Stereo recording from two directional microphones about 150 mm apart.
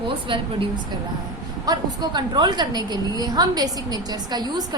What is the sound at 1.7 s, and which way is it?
A woman's voice, 25° right (ahead or behind).